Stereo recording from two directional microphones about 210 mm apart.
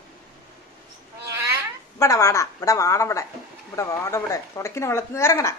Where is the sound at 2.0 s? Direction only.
15° left (ahead or behind).